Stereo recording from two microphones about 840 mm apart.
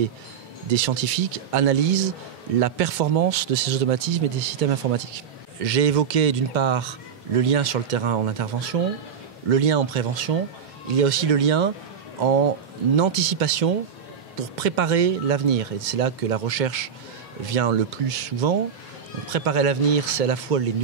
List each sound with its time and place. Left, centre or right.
0.7 s speech: right
12.9 s speech: right